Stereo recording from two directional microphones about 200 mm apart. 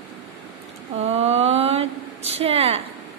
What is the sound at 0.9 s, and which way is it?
A woman's voice, 30° right (ahead or behind).